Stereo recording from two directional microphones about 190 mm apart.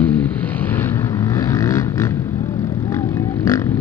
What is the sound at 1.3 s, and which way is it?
Vehicle, 15° left (ahead or behind).